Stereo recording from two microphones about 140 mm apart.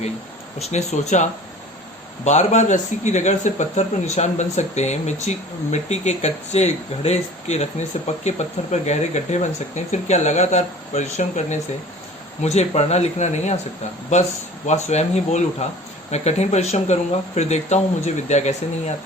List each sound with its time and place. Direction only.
0.6 s speech: 50° left (ahead or behind)
14.7 s speech: 55° left (ahead or behind)